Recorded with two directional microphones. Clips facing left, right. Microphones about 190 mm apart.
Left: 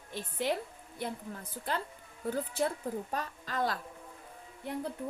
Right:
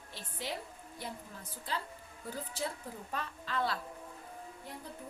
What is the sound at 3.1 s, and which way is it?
Speech, 40° left (ahead or behind).